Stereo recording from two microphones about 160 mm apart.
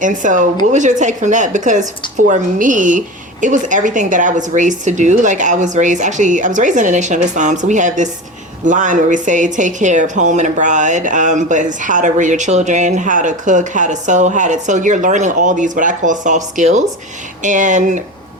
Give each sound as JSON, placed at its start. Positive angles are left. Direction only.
{"t": 0.0, "sound": "a woman's voice", "side_deg": -50}